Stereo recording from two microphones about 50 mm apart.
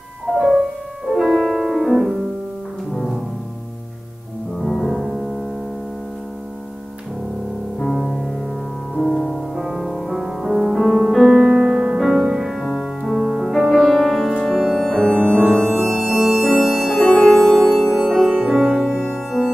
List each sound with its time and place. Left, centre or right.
0.3 s music: centre
4.6 s music: centre
8.9 s music: centre
14.8 s music: centre
16.0 s music: centre